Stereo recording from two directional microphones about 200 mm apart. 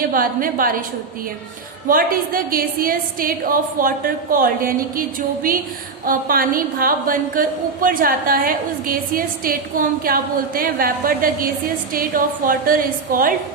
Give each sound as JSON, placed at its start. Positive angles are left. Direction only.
{"t": 0.1, "sound": "a woman's voice", "side_deg": -45}
{"t": 1.9, "sound": "a woman's voice", "side_deg": -45}